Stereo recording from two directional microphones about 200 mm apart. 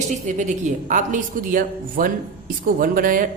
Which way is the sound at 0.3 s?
40° right (ahead or behind).